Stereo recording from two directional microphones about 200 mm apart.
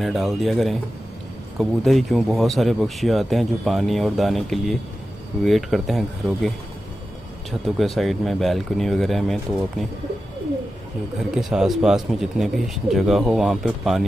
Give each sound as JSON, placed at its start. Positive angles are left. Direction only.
{"t": 0.0, "sound": "speech", "side_deg": 0}
{"t": 7.6, "sound": "speech", "side_deg": 0}
{"t": 11.3, "sound": "speech", "side_deg": 0}